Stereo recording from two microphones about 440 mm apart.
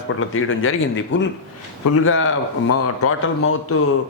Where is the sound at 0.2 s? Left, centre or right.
Left.